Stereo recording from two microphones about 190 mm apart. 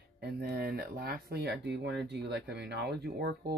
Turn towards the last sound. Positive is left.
turn(degrees=-55)  # may be behind; listen again after turning